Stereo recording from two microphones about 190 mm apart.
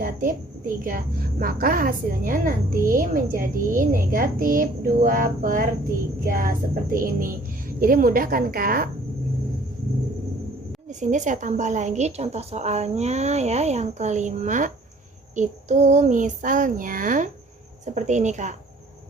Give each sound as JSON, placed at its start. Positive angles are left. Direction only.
{"t": 0.0, "sound": "a woman's voice", "side_deg": -45}
{"t": 11.0, "sound": "a woman's voice", "side_deg": -40}